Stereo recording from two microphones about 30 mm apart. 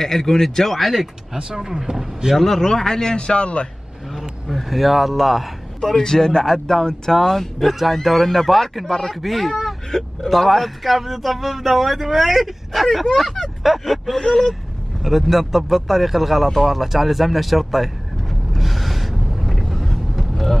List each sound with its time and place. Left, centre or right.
0.0 s speech: centre
0.7 s speech: centre
1.3 s speech: centre
2.3 s speech: centre
2.6 s speech: left
3.3 s speech: left
4.1 s speech: centre
5.9 s speech: centre
8.8 s speech: centre
9.1 s speech: centre
16.8 s speech: centre
18.6 s music: centre